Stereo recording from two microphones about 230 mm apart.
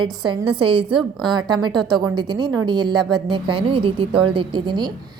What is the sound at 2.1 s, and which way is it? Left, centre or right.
A woman's voice, right.